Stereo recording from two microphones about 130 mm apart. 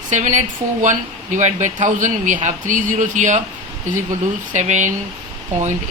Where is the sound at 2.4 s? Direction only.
90° right; by 3.4 s 70° right (ahead or behind).